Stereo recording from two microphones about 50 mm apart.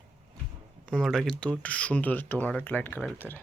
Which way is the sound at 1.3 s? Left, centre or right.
Left.